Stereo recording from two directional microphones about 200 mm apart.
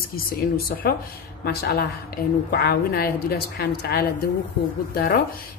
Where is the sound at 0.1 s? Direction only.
50° left (ahead or behind).